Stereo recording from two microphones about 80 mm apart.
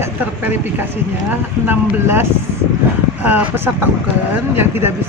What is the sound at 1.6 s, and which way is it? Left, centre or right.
Speech, right.